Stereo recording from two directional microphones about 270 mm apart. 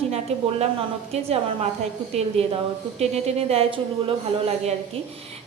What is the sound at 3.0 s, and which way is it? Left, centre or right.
Speech, right.